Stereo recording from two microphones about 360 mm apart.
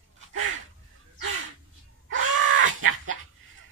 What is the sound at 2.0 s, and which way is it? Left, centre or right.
Crow, right.